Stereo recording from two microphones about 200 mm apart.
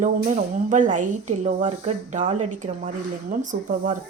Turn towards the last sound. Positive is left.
turn(degrees=-40)  # may be behind; listen again after turning